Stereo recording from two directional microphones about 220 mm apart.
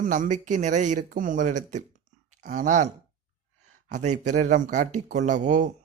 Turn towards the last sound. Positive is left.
turn(degrees=-35)  # may be behind; listen again after turning